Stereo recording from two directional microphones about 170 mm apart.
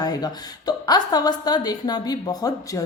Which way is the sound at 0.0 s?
25° left (ahead or behind).